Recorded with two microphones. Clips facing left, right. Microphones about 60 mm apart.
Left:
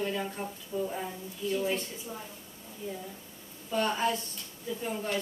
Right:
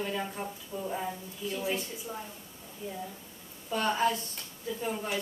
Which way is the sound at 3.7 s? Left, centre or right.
Centre.